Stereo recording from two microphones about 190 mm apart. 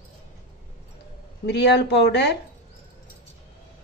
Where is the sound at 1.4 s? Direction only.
65° left (ahead or behind).